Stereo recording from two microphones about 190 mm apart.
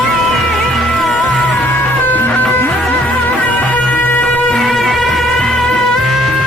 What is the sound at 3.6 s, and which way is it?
Music, 10° left (ahead or behind).